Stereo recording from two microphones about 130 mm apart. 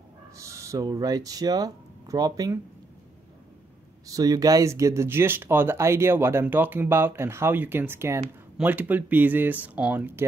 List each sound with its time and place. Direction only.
0.4 s speech: 25° right (ahead or behind)
4.1 s speech: 30° right (ahead or behind)